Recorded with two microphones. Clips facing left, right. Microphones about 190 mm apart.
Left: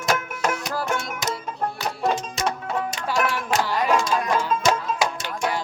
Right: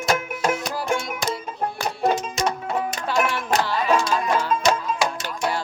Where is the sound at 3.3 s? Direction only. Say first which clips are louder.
Right 1 dB; 10° left (ahead or behind).